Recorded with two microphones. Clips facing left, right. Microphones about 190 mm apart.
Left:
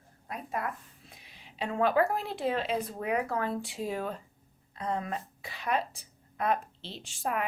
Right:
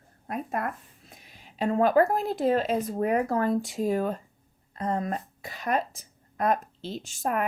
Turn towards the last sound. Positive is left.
turn(degrees=-45)  # may be behind; listen again after turning